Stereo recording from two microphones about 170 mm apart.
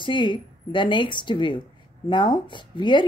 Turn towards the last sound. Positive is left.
turn(degrees=25)  # may be behind; listen again after turning